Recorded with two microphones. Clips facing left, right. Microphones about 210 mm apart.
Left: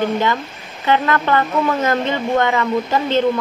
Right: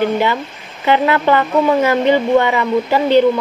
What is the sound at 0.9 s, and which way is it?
Speech, 15° right (ahead or behind).